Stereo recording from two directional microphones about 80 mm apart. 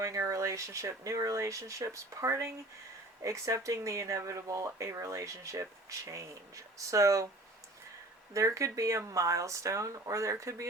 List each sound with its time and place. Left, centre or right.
0.0 s speech: right
8.3 s speech: right